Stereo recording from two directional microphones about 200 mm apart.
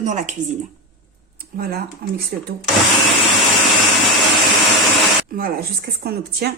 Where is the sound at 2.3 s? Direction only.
50° right (ahead or behind).